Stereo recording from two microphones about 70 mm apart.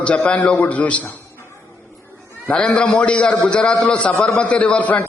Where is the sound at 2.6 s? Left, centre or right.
Centre.